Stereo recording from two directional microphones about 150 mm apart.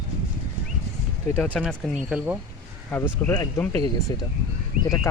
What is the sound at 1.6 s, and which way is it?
Speech, 10° right (ahead or behind).